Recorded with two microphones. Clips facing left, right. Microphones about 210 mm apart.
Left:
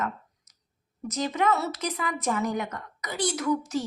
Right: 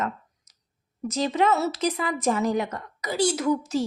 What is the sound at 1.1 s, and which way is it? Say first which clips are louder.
Speech: right 3 dB; 30° right (ahead or behind).